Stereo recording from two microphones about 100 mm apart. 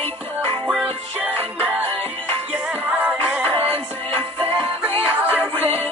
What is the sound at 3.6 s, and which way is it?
Music, 25° left (ahead or behind).